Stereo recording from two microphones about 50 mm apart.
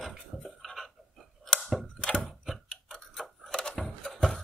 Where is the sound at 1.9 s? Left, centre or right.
Left.